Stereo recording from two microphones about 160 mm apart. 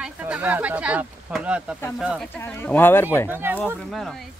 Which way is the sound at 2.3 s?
15° left (ahead or behind).